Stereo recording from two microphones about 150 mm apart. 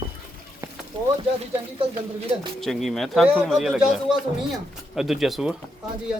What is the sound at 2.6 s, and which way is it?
Speech, centre (ahead or behind).